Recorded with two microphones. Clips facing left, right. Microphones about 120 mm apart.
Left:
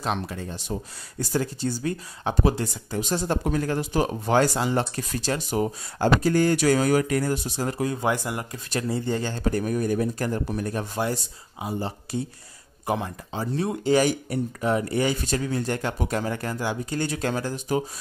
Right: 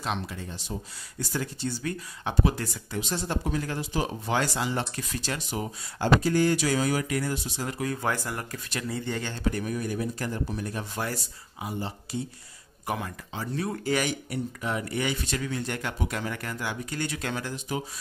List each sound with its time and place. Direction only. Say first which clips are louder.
0.0 s speech: left 4 dB; 45° left (ahead or behind); by 3.0 s 25° left (ahead or behind)
3.0 s speech: left 5 dB; 45° left (ahead or behind)
7.8 s speech: left 3 dB; 20° left (ahead or behind)
8.6 s speech: left 7 dB; 35° left (ahead or behind); by 10.9 s 50° left (ahead or behind)
12.8 s speech: left 5 dB; 25° left (ahead or behind)
14.0 s speech: left 6 dB; 40° left (ahead or behind)